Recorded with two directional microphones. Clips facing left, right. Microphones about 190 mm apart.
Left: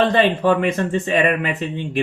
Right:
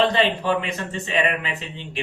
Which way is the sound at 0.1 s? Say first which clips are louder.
Left 5 dB; 50° left (ahead or behind).